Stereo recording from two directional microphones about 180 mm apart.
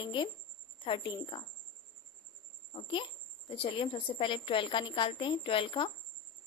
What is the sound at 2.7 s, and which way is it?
A woman's voice, 30° left (ahead or behind).